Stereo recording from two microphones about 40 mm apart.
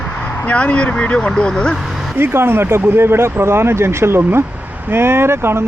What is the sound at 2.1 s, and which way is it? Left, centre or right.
A man's voice, right.